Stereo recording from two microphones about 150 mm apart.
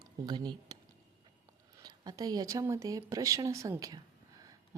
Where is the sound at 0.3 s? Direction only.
30° right (ahead or behind).